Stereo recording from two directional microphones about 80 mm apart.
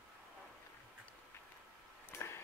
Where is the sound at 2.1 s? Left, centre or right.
Left.